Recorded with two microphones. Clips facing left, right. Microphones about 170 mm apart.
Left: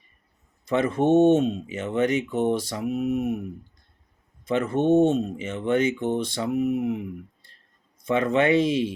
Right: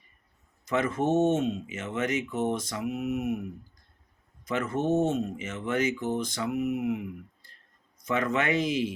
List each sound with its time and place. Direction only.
0.6 s speech: 30° left (ahead or behind)